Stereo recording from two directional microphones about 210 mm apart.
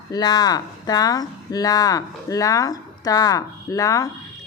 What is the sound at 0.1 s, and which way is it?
A woman's voice, 20° left (ahead or behind).